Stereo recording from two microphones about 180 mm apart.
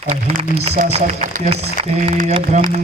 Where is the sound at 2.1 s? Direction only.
40° right (ahead or behind).